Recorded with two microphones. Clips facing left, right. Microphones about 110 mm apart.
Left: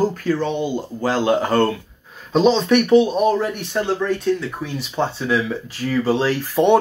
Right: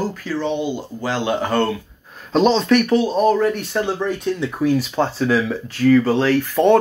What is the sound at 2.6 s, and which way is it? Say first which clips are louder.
Speech: left 2 dB; 25° left (ahead or behind).